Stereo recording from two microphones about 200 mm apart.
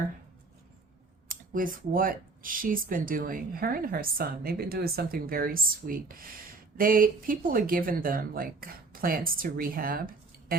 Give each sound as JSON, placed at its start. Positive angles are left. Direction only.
{"t": 1.3, "sound": "speech", "side_deg": -45}